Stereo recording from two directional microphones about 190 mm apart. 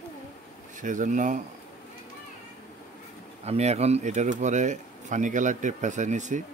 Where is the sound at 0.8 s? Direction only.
40° right (ahead or behind).